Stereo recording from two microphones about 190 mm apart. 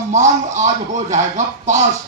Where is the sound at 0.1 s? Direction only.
40° right (ahead or behind).